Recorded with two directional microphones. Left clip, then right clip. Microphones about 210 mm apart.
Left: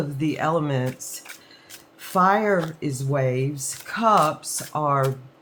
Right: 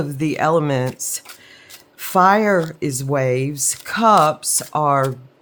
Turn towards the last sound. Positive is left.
turn(degrees=-50)  # may be behind; listen again after turning